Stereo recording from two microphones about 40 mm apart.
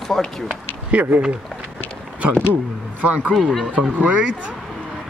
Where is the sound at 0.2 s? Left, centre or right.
Centre.